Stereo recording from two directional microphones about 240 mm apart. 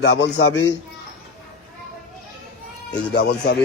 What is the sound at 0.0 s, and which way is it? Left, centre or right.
Speech, left.